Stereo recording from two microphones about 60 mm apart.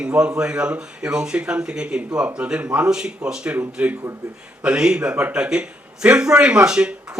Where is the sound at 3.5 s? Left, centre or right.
Right.